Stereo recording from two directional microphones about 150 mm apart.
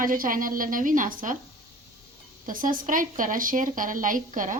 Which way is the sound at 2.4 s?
65° right (ahead or behind).